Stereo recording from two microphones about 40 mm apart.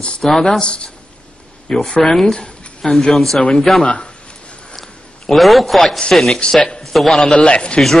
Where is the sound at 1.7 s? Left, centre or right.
Centre.